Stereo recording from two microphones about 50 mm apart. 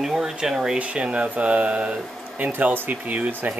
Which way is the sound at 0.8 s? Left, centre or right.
Right.